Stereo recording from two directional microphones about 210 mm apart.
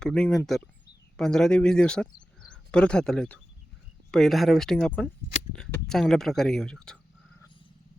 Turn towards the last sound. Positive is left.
turn(degrees=5)  # may be behind; listen again after turning